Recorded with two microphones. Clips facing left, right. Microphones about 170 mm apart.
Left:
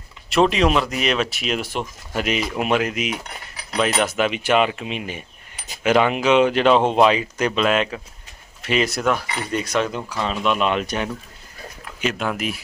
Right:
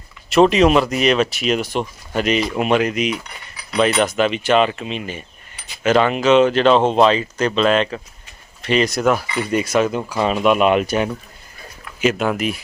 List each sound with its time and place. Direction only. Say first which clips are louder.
0.3 s speech: right 5 dB; centre (ahead or behind)
3.1 s cutlery: right 4 dB; 45° left (ahead or behind)
3.8 s speech: right 4 dB; 5° left (ahead or behind)